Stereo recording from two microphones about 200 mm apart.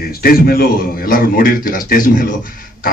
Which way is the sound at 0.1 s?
50° left (ahead or behind).